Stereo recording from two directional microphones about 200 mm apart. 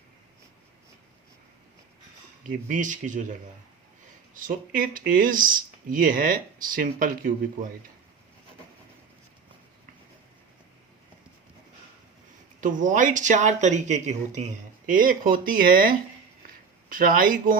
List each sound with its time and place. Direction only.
2.5 s speech: 40° right (ahead or behind)
4.4 s speech: 45° right (ahead or behind)
12.5 s speech: 40° right (ahead or behind)